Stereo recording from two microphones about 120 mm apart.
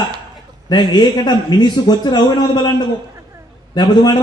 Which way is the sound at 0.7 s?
35° left (ahead or behind).